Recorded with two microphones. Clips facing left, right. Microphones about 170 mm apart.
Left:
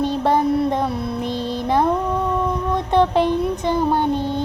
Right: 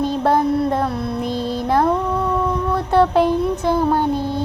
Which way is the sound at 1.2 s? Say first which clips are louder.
Right 2 dB; 40° right (ahead or behind).